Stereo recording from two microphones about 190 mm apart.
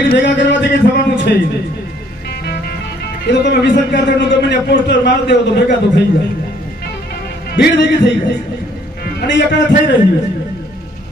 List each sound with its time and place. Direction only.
0.1 s a sound: 65° left (ahead or behind)
3.2 s a man's voice: 65° left (ahead or behind)
7.5 s a man's voice: 65° left (ahead or behind)